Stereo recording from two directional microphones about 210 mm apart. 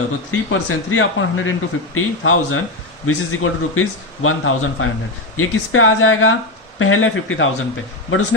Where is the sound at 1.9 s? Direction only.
80° left.